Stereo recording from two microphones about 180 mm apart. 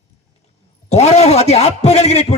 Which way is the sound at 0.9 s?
35° left (ahead or behind).